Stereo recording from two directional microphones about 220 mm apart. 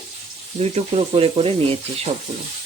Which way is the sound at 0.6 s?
25° right (ahead or behind).